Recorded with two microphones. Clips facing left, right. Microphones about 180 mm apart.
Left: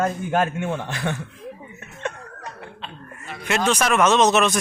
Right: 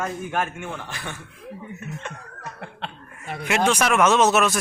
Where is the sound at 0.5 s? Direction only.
60° left (ahead or behind).